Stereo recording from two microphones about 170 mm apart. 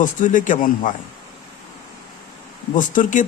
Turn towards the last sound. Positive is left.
turn(degrees=50)  # may be behind; listen again after turning